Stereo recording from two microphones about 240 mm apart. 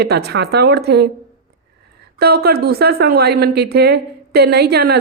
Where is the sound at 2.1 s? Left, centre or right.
Right.